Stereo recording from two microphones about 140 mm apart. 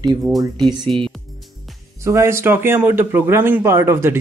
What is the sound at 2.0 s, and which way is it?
Speech, 20° right (ahead or behind).